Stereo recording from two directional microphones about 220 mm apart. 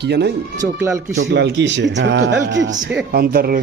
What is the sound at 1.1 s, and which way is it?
A man's voice, 50° right (ahead or behind).